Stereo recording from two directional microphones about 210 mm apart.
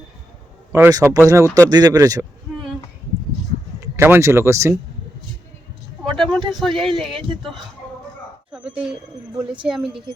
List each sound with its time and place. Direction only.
0.7 s speech: 15° right (ahead or behind)
3.8 s speech: 10° right (ahead or behind)
6.0 s vehicle: centre (ahead or behind)
6.5 s speech: centre (ahead or behind)